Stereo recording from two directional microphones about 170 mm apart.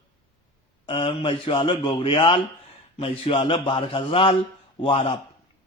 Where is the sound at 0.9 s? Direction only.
30° left (ahead or behind).